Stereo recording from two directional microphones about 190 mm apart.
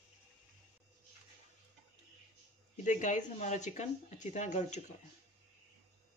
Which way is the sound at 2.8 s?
40° left (ahead or behind).